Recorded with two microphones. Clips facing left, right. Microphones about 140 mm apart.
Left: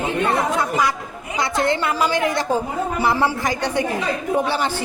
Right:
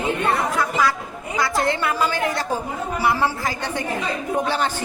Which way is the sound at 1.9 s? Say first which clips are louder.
Left 2 dB; 15° left (ahead or behind).